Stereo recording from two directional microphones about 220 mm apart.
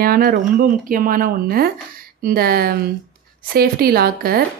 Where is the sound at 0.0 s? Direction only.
40° right (ahead or behind).